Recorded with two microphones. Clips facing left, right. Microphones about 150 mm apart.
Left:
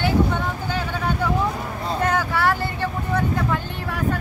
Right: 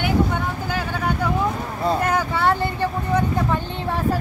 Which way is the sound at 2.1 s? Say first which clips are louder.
Right 1 dB; 20° right (ahead or behind).